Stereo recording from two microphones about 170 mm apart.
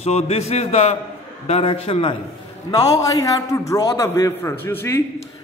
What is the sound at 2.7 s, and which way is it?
A man's voice, 20° left (ahead or behind).